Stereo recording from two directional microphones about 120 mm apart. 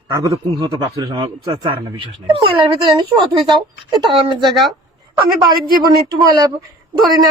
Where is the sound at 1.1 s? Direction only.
45° right (ahead or behind).